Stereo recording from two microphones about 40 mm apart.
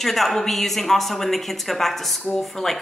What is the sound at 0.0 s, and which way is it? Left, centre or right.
A woman's voice, centre.